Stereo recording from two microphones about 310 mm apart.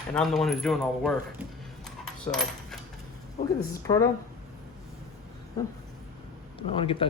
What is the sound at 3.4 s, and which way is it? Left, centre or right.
Speech, left.